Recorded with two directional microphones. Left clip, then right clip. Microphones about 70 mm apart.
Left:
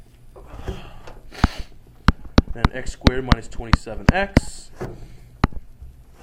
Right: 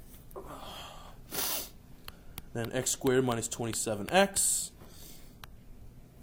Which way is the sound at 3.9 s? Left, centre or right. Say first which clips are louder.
Left 1 dB; right.